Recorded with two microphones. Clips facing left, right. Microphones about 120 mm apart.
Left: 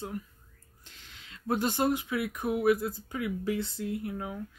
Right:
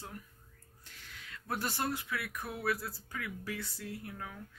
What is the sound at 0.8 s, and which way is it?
Speech, 20° left (ahead or behind).